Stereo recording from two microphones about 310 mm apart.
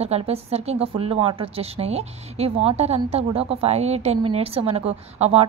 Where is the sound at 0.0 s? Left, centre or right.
Centre.